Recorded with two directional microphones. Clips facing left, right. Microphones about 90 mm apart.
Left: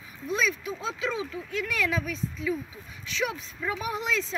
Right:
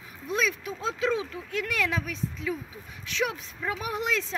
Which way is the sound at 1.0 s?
55° right (ahead or behind).